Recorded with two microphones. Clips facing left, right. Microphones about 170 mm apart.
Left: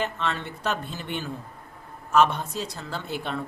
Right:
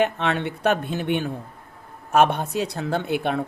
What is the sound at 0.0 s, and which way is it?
A woman's voice, 65° right (ahead or behind).